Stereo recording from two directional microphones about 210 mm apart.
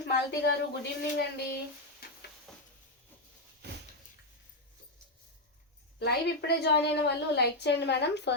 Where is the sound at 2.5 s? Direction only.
Centre (ahead or behind).